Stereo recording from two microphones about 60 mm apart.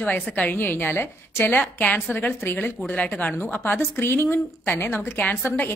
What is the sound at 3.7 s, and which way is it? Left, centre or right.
A woman's voice, left.